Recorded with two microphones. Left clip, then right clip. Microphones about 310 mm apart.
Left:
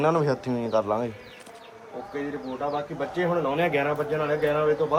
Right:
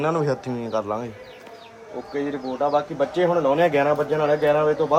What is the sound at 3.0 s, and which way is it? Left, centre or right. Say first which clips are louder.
A man's voice: right 4 dB; centre.